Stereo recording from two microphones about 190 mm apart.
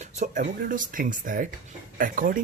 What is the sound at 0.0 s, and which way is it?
Speech, 40° right (ahead or behind).